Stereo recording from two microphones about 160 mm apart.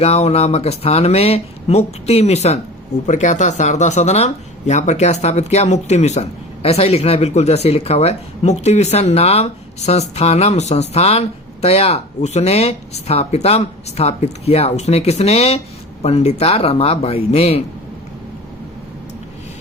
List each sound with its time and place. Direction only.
0.0 s speech: 40° left (ahead or behind)